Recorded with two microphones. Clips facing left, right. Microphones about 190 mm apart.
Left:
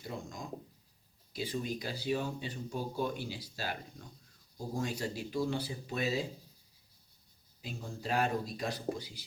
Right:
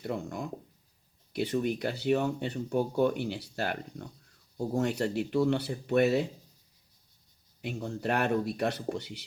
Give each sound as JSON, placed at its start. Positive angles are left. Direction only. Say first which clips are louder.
{"t": 0.0, "sound": "speech", "louder": "right 8 dB", "side_deg": -65}
{"t": 7.6, "sound": "speech", "louder": "right 8 dB", "side_deg": -70}